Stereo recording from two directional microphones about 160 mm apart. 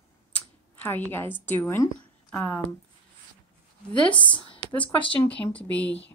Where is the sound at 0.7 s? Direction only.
10° left (ahead or behind).